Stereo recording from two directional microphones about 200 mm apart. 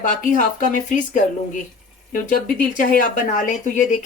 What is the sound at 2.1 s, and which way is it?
Speech, 45° left (ahead or behind).